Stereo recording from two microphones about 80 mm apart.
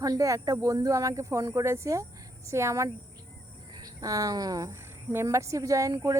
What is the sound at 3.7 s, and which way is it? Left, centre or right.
Speech, right.